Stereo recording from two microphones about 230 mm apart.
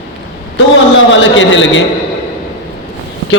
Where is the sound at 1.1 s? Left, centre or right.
Left.